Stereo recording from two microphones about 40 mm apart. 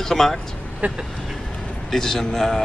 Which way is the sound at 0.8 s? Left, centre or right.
Right.